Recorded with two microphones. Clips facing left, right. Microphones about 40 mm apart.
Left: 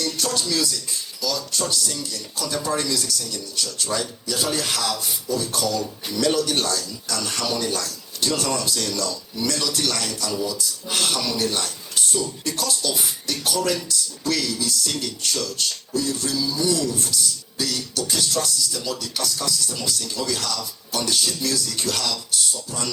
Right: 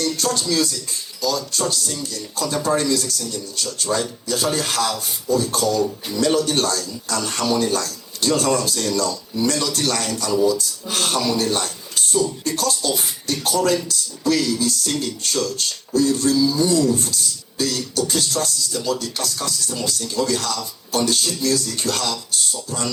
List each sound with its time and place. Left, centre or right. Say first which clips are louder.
0.0 s speech: right 3 dB; right
3.5 s speech: right 3 dB; right
12.9 s speech: right 3 dB; right